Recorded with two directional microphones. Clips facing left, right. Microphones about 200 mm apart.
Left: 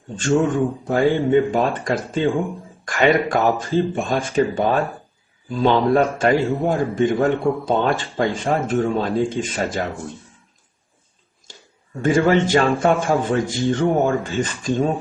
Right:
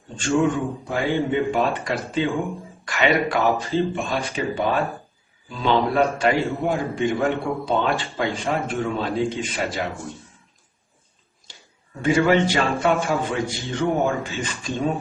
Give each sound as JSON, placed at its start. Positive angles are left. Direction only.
{"t": 0.2, "sound": "a man's voice", "side_deg": 45}
{"t": 12.0, "sound": "a man's voice", "side_deg": 50}